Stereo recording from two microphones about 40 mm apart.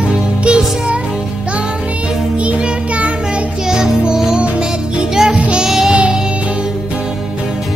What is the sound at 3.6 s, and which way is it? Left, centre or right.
Music, centre.